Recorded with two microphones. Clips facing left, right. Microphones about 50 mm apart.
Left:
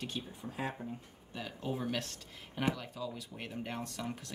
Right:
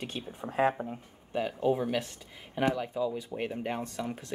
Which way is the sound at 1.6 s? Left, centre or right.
Centre.